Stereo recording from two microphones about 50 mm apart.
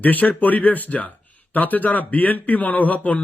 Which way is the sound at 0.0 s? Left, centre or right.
Left.